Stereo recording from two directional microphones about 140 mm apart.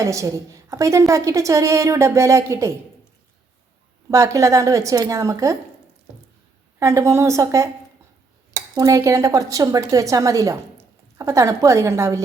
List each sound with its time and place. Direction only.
0.0 s a woman's voice: 20° right (ahead or behind)
4.1 s a woman's voice: 20° right (ahead or behind)
6.7 s a woman's voice: 20° right (ahead or behind)
8.7 s a woman's voice: 25° right (ahead or behind)